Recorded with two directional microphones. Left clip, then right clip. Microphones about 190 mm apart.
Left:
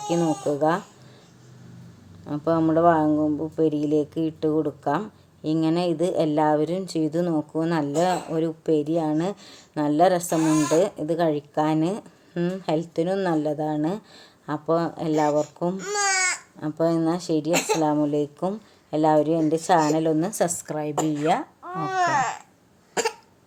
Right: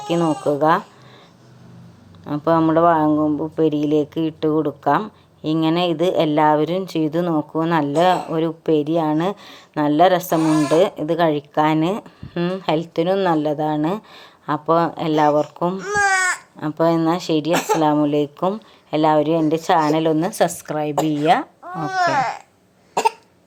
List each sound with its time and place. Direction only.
0.1 s speech: centre (ahead or behind)
2.2 s speech: 5° right (ahead or behind)
21.8 s babbling: 30° right (ahead or behind)